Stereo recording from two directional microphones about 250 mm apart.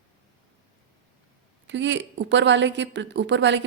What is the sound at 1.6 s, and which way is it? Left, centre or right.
Speech, right.